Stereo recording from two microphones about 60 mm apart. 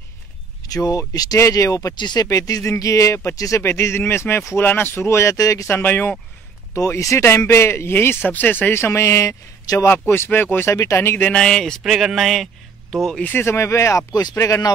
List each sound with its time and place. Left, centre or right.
0.7 s speech: left
2.8 s speech: left
3.6 s speech: left
5.4 s speech: left
5.7 s speech: left
7.0 s speech: left
8.2 s speech: left
8.7 s speech: left
10.0 s speech: left
10.7 s speech: left
11.3 s speech: centre
11.8 s speech: centre
13.2 s speech: left
13.5 s speech: left